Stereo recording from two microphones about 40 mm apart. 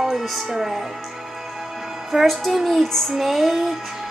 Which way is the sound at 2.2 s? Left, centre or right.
Centre.